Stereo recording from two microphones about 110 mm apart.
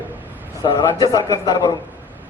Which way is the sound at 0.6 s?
40° left (ahead or behind).